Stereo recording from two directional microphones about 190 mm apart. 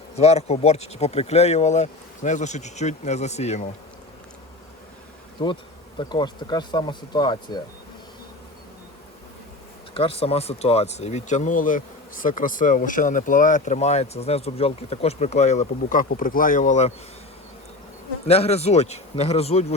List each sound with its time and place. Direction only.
0.2 s speech: 35° left (ahead or behind)
6.0 s speech: 25° left (ahead or behind)
9.9 s speech: 30° left (ahead or behind)
18.3 s speech: 30° left (ahead or behind)